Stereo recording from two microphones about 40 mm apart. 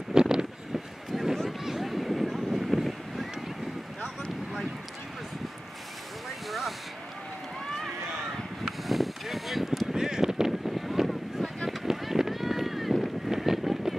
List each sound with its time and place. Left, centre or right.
0.1 s vehicle: centre
1.1 s run: centre
1.6 s vehicle: centre
8.6 s a sound: centre
11.4 s a sound: centre
11.8 s run: centre